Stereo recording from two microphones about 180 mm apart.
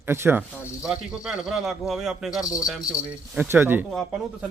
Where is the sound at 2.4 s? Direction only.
20° left (ahead or behind).